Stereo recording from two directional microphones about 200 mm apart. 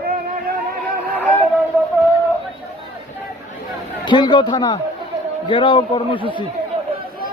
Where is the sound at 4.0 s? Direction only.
20° left (ahead or behind).